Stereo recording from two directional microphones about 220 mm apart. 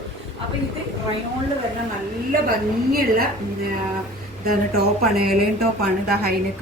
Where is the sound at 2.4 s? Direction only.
40° right (ahead or behind).